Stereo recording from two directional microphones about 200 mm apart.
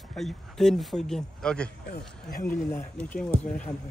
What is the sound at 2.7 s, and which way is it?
Speech, 10° left (ahead or behind).